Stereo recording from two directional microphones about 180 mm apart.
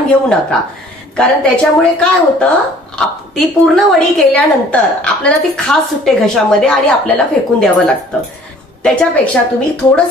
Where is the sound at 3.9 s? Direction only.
10° left (ahead or behind).